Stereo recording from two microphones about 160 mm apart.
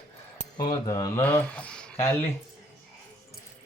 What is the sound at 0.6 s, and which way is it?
Speech, 25° left (ahead or behind).